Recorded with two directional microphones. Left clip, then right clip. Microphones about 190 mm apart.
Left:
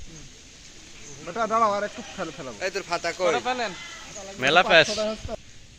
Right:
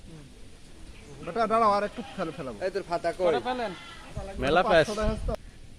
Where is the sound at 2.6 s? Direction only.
15° right (ahead or behind).